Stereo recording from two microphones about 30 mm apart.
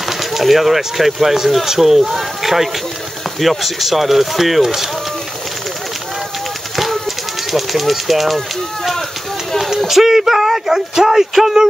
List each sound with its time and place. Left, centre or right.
0.2 s speech: centre
7.5 s speech: centre
9.8 s speech: centre